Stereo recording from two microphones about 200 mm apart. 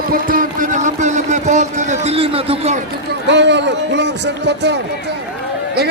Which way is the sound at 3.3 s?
60° right (ahead or behind).